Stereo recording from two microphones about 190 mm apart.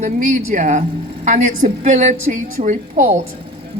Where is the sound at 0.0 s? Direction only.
45° right (ahead or behind).